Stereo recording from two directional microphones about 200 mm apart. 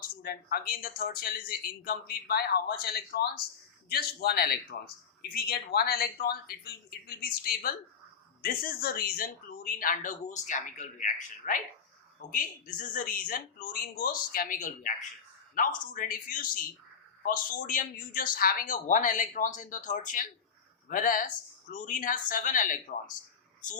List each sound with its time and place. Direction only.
0.2 s a man's voice: 50° left (ahead or behind)